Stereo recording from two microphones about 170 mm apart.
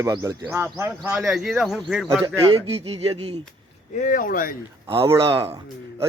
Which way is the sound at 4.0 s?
50° left (ahead or behind).